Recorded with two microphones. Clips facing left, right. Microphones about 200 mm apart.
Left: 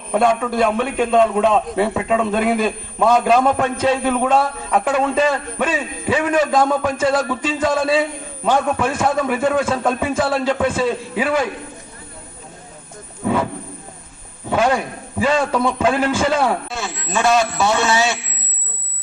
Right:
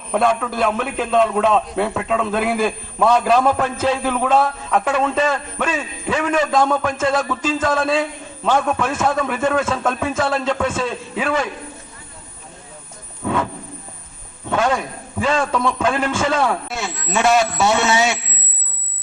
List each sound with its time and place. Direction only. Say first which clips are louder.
0.1 s a man's voice: left 2 dB; 5° left (ahead or behind)
13.2 s a sound: left 2 dB; 5° left (ahead or behind)
14.5 s a man's voice: left 2 dB; 10° left (ahead or behind)
17.7 s a man's voice: even; 20° right (ahead or behind)